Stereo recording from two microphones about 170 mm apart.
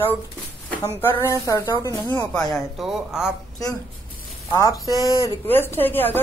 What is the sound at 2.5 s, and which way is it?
Speech, 5° right (ahead or behind).